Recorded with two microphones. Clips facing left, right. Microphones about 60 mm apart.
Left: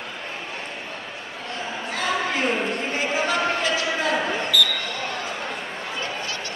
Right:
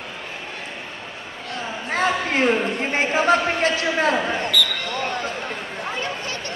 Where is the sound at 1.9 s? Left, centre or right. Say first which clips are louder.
Right 4 dB; right.